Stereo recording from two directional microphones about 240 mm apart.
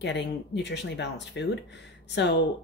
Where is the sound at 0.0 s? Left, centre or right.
Left.